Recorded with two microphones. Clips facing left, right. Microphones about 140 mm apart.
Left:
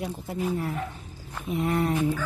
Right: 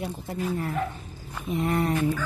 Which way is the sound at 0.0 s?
5° left (ahead or behind).